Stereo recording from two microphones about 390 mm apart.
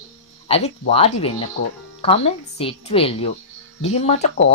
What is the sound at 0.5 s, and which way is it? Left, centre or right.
Speech, centre.